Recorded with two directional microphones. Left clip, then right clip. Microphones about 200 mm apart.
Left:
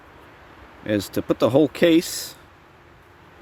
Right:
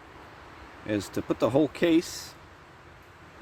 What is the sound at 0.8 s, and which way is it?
Speech, 50° left (ahead or behind).